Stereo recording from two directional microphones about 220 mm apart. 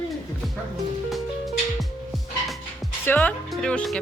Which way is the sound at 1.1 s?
Centre (ahead or behind).